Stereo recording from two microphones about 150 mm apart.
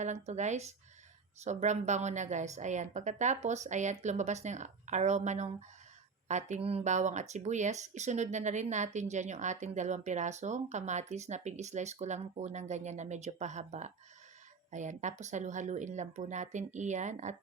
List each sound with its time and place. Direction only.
0.0 s speech: 50° right (ahead or behind)